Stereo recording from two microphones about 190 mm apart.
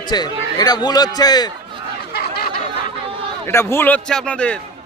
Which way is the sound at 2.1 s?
55° left (ahead or behind).